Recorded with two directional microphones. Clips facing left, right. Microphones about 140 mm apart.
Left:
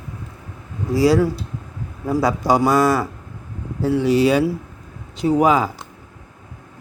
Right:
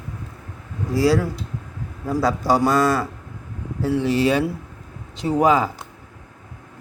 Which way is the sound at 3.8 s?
15° left (ahead or behind).